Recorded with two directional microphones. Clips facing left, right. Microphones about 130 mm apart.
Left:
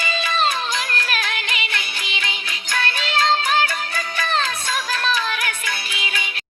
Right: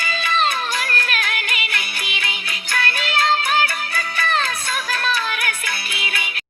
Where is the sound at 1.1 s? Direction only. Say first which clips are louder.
Even; 30° left (ahead or behind).